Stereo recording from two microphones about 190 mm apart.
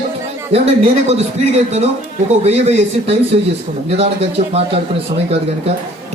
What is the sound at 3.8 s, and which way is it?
Speech, 35° right (ahead or behind).